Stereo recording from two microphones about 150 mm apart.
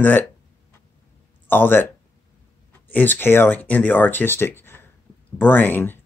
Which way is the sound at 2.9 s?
15° left (ahead or behind).